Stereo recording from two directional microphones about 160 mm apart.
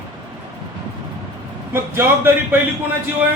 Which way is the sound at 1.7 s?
15° right (ahead or behind).